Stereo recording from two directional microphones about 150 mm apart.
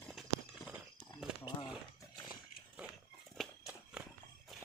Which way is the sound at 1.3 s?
5° right (ahead or behind).